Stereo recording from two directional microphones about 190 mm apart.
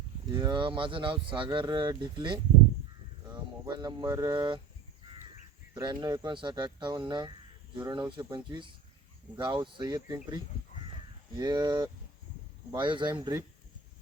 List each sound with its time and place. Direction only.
0.3 s speech: 25° right (ahead or behind)
5.8 s speech: 20° right (ahead or behind)
11.3 s speech: 20° right (ahead or behind)